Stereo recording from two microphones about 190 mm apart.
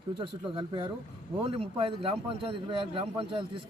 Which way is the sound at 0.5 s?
25° right (ahead or behind).